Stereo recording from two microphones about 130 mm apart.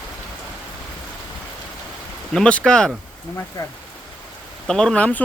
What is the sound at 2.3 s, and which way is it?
Speech, 5° left (ahead or behind).